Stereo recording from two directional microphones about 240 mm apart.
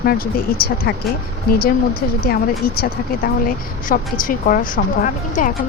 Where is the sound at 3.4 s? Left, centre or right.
Left.